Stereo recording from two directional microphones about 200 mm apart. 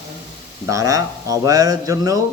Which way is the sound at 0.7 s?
15° right (ahead or behind).